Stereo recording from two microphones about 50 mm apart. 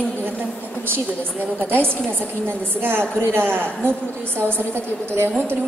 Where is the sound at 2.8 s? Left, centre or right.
Right.